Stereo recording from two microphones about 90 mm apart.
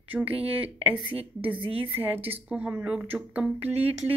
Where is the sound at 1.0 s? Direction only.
75° right (ahead or behind).